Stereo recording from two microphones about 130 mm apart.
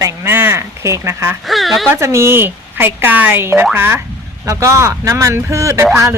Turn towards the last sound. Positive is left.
turn(degrees=-25)  # may be behind; listen again after turning